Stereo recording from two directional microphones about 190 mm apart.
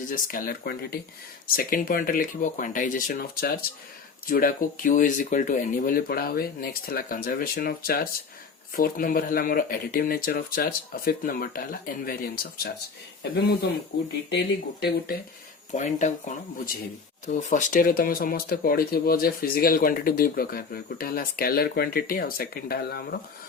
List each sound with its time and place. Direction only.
0.1 s speech: 45° left (ahead or behind)
15.7 s speech: 40° left (ahead or behind)